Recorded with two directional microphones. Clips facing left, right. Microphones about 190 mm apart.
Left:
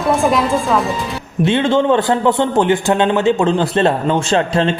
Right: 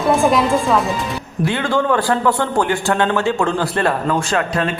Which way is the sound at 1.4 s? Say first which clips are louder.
Left 5 dB; 25° left (ahead or behind).